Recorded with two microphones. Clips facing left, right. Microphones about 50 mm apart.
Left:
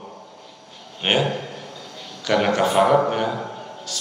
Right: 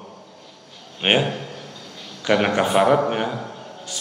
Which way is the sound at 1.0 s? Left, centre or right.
Right.